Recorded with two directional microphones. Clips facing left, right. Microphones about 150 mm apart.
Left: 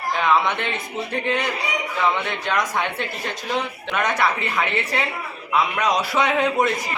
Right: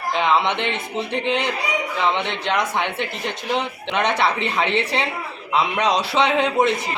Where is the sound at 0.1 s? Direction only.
20° right (ahead or behind).